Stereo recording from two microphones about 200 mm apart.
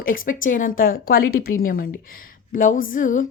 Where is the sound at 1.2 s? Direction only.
90° left.